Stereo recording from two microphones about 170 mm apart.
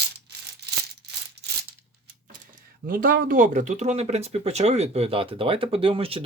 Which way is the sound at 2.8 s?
55° right (ahead or behind).